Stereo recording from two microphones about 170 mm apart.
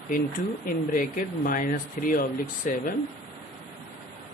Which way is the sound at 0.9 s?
55° left (ahead or behind).